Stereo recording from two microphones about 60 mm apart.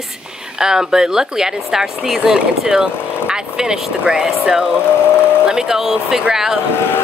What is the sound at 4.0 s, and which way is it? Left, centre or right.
Speech, centre.